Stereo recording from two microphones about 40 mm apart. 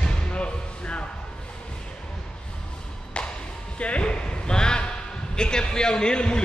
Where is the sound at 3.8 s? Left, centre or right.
Left.